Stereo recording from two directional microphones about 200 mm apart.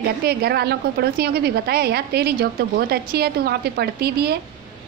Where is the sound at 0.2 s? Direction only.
55° right (ahead or behind).